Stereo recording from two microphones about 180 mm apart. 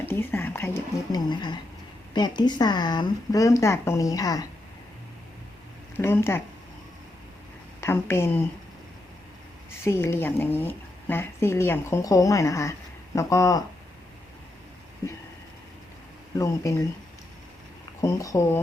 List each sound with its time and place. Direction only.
0.0 s speech: 10° left (ahead or behind)
1.3 s speech: 25° left (ahead or behind)
6.0 s speech: 15° left (ahead or behind)
7.8 s speech: 15° left (ahead or behind)
9.8 s speech: 15° left (ahead or behind)
16.3 s speech: 15° left (ahead or behind)
18.0 s speech: 20° left (ahead or behind)